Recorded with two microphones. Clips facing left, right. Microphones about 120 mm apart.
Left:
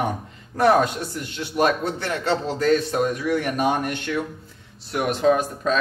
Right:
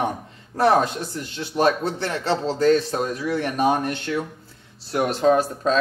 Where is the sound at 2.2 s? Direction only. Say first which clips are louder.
Right 2 dB; 30° right (ahead or behind).